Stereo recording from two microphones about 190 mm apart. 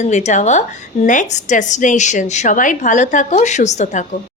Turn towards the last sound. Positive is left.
turn(degrees=40)  # may be behind; listen again after turning